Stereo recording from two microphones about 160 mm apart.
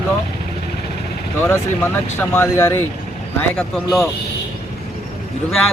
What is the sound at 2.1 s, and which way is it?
Speech, 15° left (ahead or behind).